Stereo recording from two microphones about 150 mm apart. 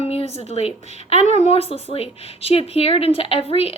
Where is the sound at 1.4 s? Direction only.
40° left (ahead or behind).